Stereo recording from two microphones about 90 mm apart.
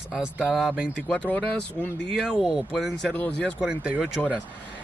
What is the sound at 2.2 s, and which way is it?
Speech, 5° right (ahead or behind).